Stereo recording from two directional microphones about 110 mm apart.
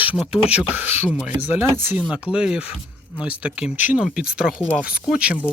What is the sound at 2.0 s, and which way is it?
Speech, 10° right (ahead or behind).